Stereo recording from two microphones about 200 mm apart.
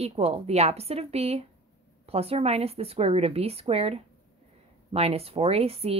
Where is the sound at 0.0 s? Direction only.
30° right (ahead or behind).